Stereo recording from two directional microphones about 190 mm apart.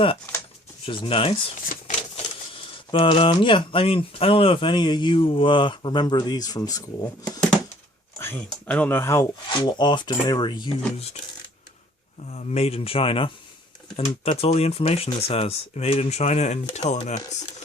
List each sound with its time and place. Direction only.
0.9 s speech: 25° left (ahead or behind)
1.7 s a sound: 40° left (ahead or behind)
2.9 s speech: 30° left (ahead or behind)
8.2 s speech: 10° left (ahead or behind); by 11.2 s 30° left (ahead or behind)
12.3 s speech: 35° left (ahead or behind)